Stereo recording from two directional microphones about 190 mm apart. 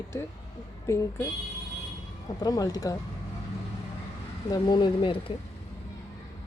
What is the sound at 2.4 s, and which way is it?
Speech, 20° left (ahead or behind).